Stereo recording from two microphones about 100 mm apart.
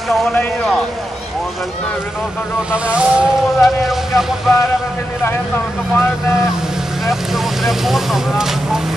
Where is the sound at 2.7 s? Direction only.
10° right (ahead or behind).